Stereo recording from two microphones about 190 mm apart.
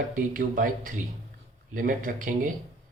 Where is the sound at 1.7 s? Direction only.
45° right (ahead or behind).